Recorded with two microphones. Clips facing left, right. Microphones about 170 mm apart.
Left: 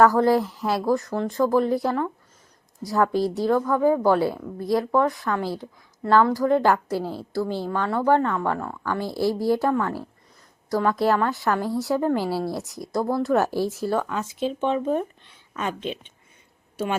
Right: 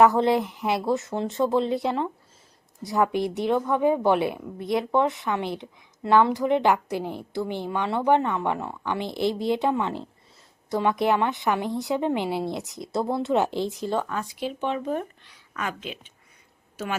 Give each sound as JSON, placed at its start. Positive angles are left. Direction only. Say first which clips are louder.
{"t": 0.0, "sound": "a woman's voice", "louder": "left 1 dB", "side_deg": -20}
{"t": 13.9, "sound": "speech", "louder": "left 2 dB", "side_deg": 15}
{"t": 14.9, "sound": "a sound", "louder": "left 4 dB", "side_deg": 25}